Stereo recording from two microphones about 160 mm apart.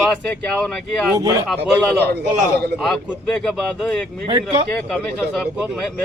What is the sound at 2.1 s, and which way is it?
Speech, 90° right.